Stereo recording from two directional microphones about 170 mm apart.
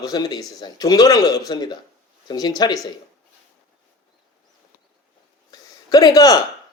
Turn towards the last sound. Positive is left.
turn(degrees=20)  # may be behind; listen again after turning